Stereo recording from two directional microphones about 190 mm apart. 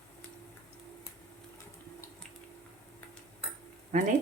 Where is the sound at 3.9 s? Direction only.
40° right (ahead or behind).